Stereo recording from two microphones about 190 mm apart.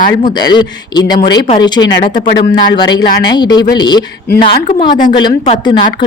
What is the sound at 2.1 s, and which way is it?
Speech, 60° left (ahead or behind).